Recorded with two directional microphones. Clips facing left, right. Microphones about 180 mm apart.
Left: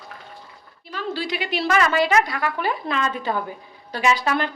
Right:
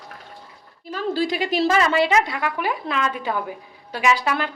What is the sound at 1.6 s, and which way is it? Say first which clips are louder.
Speech: even; 25° right (ahead or behind).